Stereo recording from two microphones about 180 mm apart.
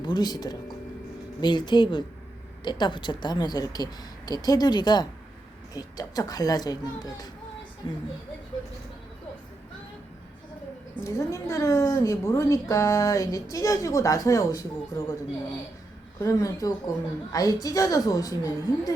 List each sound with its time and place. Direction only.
0.0 s a woman's voice: 25° left (ahead or behind)
11.0 s a woman's voice: 15° left (ahead or behind)
16.2 s a woman's voice: 20° left (ahead or behind)